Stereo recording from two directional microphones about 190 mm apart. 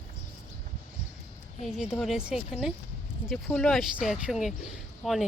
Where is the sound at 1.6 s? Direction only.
Centre (ahead or behind).